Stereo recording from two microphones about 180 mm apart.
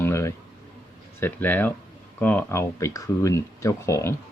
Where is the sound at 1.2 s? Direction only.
10° left (ahead or behind).